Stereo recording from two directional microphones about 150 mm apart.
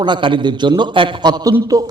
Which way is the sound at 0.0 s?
30° right (ahead or behind).